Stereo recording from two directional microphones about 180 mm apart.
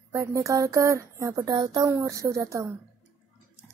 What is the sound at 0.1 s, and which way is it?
Speech, 15° right (ahead or behind).